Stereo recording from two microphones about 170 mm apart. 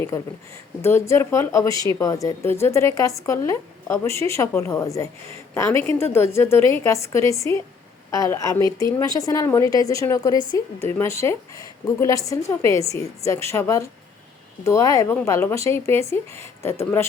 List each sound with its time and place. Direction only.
0.8 s a woman's voice: 15° left (ahead or behind)
10.3 s a woman's voice: 30° right (ahead or behind)
10.8 s a woman's voice: 15° left (ahead or behind)